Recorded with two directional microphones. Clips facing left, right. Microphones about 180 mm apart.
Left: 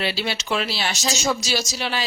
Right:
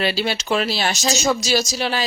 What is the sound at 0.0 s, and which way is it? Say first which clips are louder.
Speech: right 4 dB; 45° right (ahead or behind).